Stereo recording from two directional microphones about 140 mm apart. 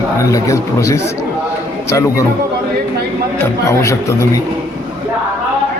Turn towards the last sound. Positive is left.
turn(degrees=20)  # may be behind; listen again after turning